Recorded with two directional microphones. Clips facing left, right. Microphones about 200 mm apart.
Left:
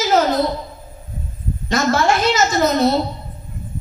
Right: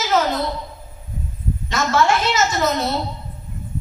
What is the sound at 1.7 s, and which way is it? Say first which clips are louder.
Speech: left 2 dB; 35° left (ahead or behind).